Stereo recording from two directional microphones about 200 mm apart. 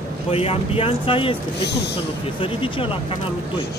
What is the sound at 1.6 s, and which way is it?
Speech, 55° left (ahead or behind).